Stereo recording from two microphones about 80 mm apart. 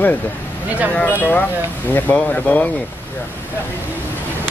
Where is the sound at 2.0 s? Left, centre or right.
Centre.